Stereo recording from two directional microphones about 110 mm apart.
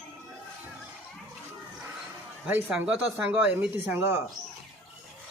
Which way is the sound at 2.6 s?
5° right (ahead or behind).